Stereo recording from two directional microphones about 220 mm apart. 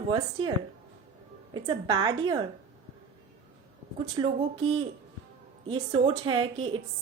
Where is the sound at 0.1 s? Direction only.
20° right (ahead or behind).